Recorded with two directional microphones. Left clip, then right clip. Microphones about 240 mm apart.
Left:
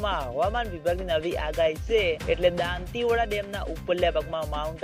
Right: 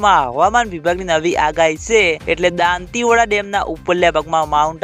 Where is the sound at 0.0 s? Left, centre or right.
Right.